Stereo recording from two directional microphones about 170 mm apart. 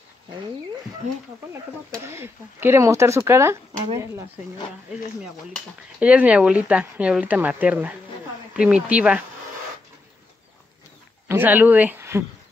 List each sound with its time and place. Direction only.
2.0 s speech: 15° right (ahead or behind)
4.9 s speech: 5° right (ahead or behind)
11.2 s speech: 10° right (ahead or behind)